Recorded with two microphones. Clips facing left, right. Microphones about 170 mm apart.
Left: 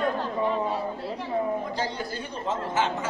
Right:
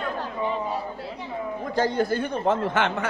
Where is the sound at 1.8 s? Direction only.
50° right (ahead or behind).